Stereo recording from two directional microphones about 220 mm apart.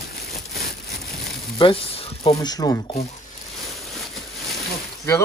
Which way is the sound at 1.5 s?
25° left (ahead or behind).